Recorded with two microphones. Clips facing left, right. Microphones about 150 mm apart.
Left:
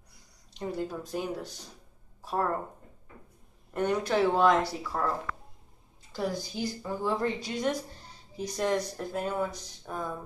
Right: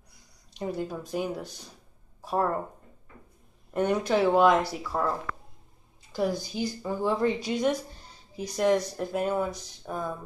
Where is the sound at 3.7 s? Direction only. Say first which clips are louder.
Right 3 dB; 15° right (ahead or behind).